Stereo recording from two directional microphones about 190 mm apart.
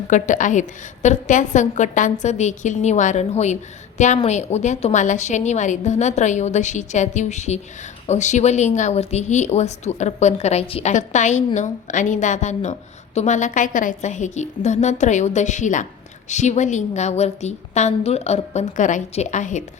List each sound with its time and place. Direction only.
0.1 s a woman's voice: 40° left (ahead or behind)